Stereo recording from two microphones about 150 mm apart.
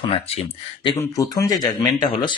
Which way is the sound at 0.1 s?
40° left (ahead or behind).